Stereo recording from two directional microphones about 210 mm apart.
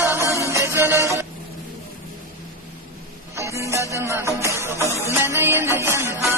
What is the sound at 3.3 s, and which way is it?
Music, 15° right (ahead or behind).